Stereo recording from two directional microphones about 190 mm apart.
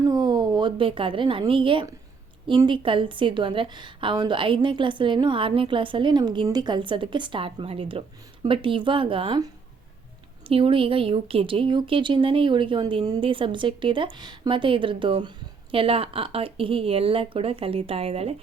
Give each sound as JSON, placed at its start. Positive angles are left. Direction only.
{"t": 0.1, "sound": "a woman's voice", "side_deg": -20}
{"t": 10.5, "sound": "a woman's voice", "side_deg": -30}